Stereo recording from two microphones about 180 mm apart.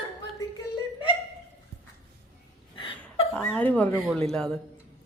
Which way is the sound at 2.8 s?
30° left (ahead or behind).